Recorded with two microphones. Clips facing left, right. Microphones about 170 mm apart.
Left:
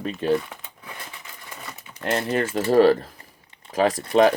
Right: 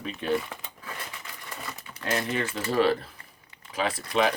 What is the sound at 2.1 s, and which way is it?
Speech, 50° left (ahead or behind).